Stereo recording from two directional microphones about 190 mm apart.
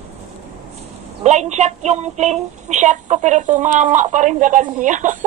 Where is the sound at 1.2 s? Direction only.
35° right (ahead or behind).